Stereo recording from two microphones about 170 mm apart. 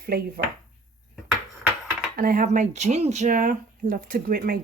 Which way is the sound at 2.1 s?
55° right (ahead or behind).